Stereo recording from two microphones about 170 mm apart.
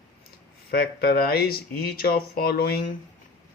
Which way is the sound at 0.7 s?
60° left (ahead or behind).